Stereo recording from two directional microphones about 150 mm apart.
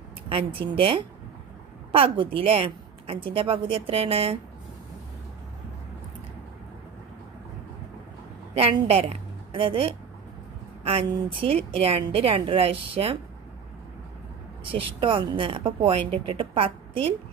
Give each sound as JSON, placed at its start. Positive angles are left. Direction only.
{"t": 0.3, "sound": "a woman's voice", "side_deg": -35}
{"t": 8.5, "sound": "a woman's voice", "side_deg": -40}
{"t": 11.2, "sound": "a woman's voice", "side_deg": -40}
{"t": 14.6, "sound": "a woman's voice", "side_deg": -35}